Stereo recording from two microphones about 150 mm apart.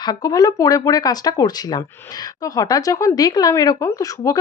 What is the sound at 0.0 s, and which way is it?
A woman's voice, 25° left (ahead or behind).